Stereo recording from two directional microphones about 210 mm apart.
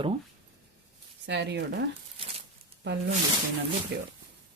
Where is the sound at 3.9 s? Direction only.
50° right (ahead or behind).